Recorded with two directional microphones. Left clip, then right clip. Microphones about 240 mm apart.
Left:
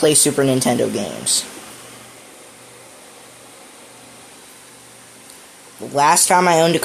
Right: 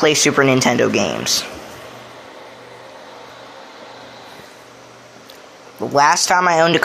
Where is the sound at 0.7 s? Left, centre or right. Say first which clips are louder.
Right 4 dB; centre.